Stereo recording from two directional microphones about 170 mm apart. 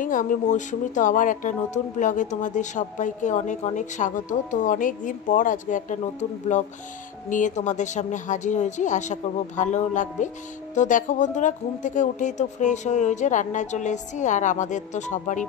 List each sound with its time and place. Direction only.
0.0 s a woman's voice: 50° left (ahead or behind)